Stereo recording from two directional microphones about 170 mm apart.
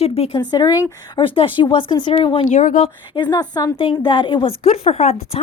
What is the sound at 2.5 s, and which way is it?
Speech, 50° left (ahead or behind).